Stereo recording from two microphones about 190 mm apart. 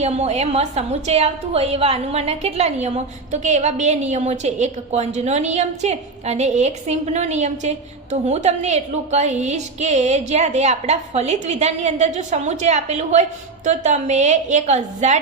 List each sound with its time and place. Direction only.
0.0 s a woman's voice: 35° right (ahead or behind)